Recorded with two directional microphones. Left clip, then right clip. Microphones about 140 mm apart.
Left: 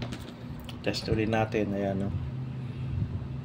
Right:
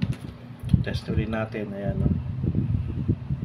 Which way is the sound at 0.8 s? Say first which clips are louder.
Left 2 dB; 70° left (ahead or behind).